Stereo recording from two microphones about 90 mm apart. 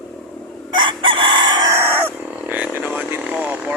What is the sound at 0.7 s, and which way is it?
Chicken, 60° right (ahead or behind).